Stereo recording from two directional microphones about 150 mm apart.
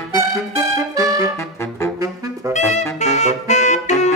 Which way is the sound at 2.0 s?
20° right (ahead or behind).